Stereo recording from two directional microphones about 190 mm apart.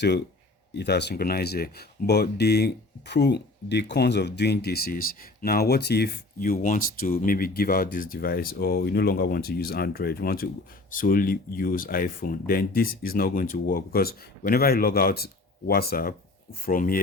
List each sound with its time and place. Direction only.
0.8 s speech: 60° left (ahead or behind)